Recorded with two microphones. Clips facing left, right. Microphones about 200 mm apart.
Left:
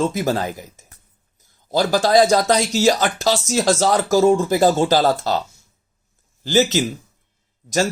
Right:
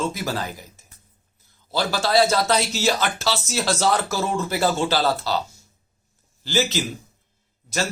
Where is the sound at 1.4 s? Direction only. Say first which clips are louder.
Left 6 dB; 45° left (ahead or behind).